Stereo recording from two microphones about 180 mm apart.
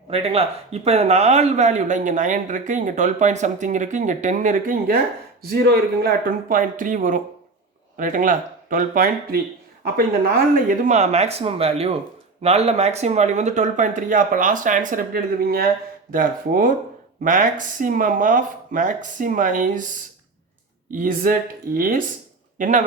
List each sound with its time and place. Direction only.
0.1 s speech: 35° right (ahead or behind); by 9.4 s 50° right (ahead or behind)
10.7 s speech: 40° right (ahead or behind)
20.9 s speech: 50° right (ahead or behind)